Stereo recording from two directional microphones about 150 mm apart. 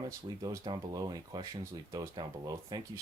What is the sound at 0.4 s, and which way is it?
Speech, 30° right (ahead or behind).